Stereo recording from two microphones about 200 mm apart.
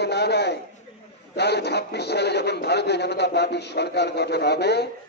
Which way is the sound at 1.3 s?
55° left (ahead or behind).